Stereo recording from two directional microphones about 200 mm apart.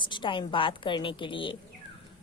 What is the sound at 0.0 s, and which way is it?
A woman's voice, 25° left (ahead or behind).